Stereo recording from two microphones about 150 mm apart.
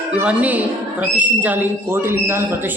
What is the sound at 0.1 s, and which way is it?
A man's voice, 10° right (ahead or behind).